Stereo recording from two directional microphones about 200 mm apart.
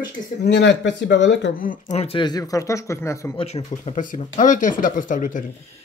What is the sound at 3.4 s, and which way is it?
Speech, 30° left (ahead or behind).